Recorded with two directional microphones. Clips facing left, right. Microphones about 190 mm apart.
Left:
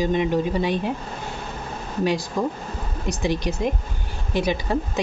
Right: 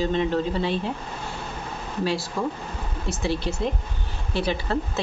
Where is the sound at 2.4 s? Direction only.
20° left (ahead or behind).